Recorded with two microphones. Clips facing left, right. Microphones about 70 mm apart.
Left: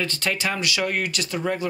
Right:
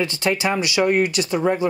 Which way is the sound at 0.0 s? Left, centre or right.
Centre.